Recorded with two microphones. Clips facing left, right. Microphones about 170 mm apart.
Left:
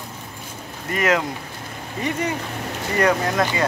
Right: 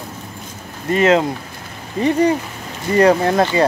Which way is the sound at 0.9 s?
25° right (ahead or behind).